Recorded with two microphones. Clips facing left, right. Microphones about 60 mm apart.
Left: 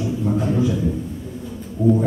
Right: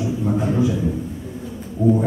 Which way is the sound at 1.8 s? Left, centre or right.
Right.